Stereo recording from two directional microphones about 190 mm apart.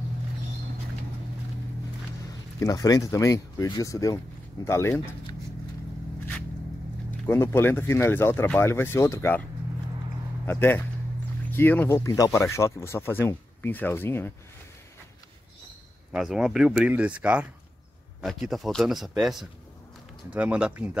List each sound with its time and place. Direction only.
2.6 s speech: 20° left (ahead or behind)
7.2 s speech: 15° left (ahead or behind)
10.4 s speech: 10° left (ahead or behind)
16.1 s speech: centre (ahead or behind)